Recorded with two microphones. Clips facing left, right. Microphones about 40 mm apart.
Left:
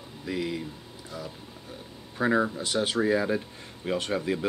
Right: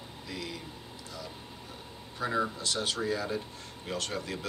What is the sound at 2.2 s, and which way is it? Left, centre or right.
Speech, left.